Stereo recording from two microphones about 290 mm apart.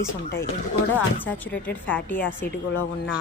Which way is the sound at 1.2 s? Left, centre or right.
Centre.